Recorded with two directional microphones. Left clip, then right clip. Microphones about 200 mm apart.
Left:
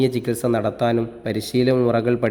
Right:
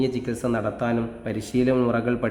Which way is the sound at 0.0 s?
25° left (ahead or behind).